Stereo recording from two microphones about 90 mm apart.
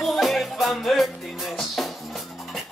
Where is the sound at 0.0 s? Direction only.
Centre (ahead or behind).